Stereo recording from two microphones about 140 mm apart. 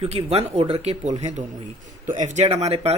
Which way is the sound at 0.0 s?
45° right (ahead or behind).